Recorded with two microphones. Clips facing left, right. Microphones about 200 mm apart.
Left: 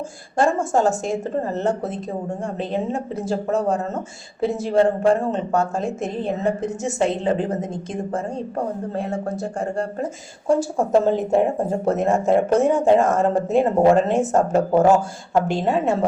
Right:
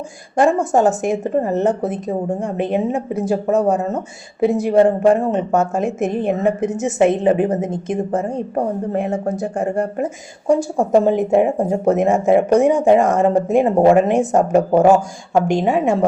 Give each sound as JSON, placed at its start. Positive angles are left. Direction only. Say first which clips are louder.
{"t": 0.3, "sound": "a woman's voice", "louder": "right 4 dB", "side_deg": -15}